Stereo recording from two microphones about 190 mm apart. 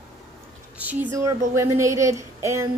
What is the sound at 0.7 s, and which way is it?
A woman's voice, 10° right (ahead or behind).